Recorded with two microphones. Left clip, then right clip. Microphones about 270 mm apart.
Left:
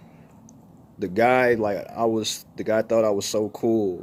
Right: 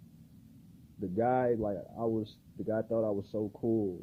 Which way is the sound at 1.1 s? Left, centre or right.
Centre.